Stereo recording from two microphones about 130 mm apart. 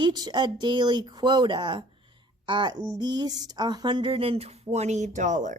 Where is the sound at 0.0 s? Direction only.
35° right (ahead or behind).